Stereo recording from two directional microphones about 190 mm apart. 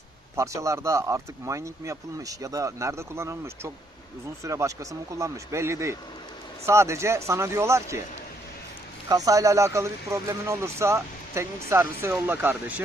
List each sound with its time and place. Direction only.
0.3 s speech: 15° right (ahead or behind)
9.0 s speech: 20° right (ahead or behind)